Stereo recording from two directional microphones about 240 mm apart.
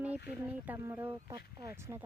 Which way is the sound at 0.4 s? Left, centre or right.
Centre.